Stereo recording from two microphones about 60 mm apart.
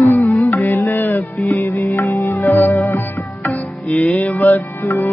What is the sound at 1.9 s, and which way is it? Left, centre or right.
Music, left.